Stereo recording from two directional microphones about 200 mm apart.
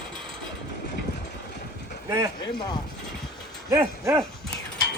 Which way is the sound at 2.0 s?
15° right (ahead or behind).